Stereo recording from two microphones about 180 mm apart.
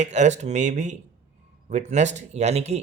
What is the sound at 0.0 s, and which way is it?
Speech, 40° right (ahead or behind).